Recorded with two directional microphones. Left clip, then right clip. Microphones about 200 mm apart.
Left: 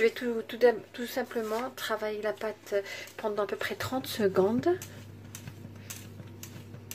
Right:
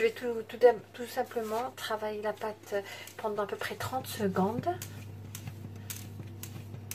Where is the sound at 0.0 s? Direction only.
45° left (ahead or behind).